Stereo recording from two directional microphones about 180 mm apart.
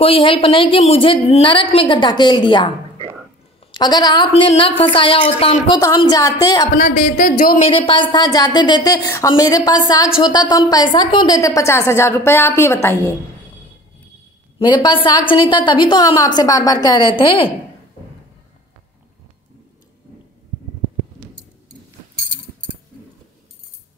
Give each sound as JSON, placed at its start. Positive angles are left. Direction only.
{"t": 0.0, "sound": "a woman's voice", "side_deg": 30}
{"t": 3.7, "sound": "a woman's voice", "side_deg": 25}
{"t": 6.8, "sound": "speech", "side_deg": 50}
{"t": 7.7, "sound": "a woman's voice", "side_deg": 30}
{"t": 14.6, "sound": "a woman's voice", "side_deg": 25}